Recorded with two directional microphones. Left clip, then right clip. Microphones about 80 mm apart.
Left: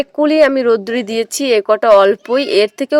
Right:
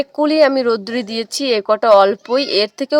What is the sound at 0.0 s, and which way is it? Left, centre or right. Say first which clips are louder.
Speech: left 2 dB; left.